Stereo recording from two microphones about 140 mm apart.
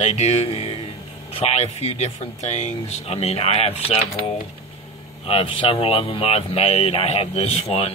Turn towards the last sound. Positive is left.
turn(degrees=45)  # may be behind; listen again after turning